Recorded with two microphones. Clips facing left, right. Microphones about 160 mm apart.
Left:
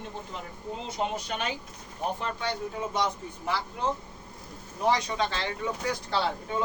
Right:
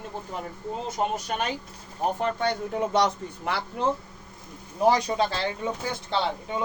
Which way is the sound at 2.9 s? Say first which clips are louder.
Right 6 dB; 70° right (ahead or behind).